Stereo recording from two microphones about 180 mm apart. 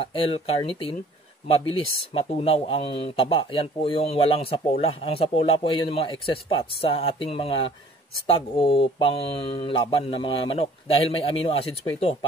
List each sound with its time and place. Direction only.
0.0 s speech: 30° left (ahead or behind)